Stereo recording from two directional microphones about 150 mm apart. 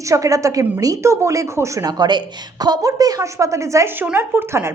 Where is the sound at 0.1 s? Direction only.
20° right (ahead or behind).